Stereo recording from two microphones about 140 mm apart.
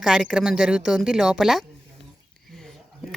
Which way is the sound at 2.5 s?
Centre (ahead or behind).